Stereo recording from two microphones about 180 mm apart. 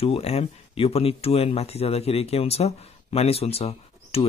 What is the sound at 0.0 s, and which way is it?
Speech, 35° left (ahead or behind).